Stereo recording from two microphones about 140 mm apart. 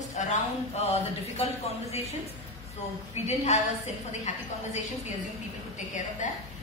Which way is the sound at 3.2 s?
50° left (ahead or behind).